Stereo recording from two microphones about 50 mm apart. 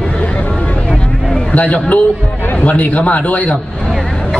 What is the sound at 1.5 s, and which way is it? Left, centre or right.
A man's voice, left.